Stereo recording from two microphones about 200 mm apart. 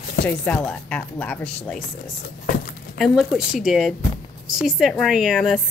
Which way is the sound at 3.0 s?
Centre (ahead or behind).